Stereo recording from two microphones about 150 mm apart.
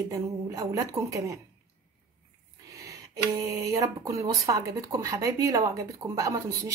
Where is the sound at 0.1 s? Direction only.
20° right (ahead or behind).